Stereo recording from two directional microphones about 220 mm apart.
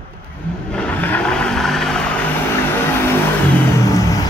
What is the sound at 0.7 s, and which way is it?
Vehicle, 5° left (ahead or behind).